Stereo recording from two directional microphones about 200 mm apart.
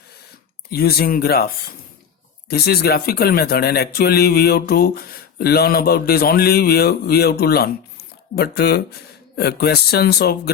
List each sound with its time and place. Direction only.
0.7 s speech: 50° left (ahead or behind)